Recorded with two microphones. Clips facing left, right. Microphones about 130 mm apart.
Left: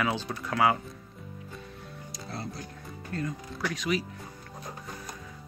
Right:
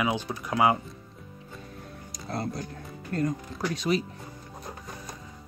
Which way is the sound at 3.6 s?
35° right (ahead or behind).